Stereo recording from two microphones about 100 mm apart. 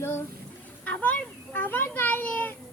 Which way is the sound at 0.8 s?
15° left (ahead or behind).